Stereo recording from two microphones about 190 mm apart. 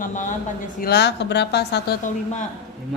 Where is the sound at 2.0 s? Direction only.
40° left (ahead or behind).